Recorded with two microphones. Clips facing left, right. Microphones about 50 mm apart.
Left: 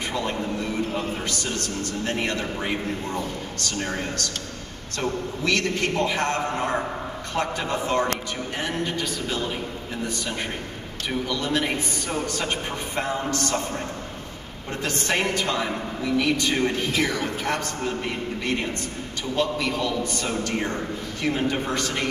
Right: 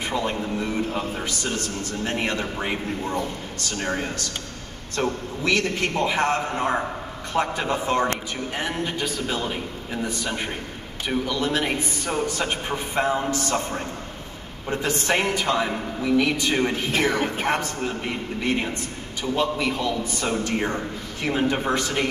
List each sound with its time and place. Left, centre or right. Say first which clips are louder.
0.1 s a man's voice: right 2 dB; centre
16.9 s speech: right 2 dB; right
17.5 s a man's voice: right 2 dB; centre